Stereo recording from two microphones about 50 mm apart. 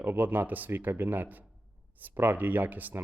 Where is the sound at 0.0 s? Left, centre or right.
Right.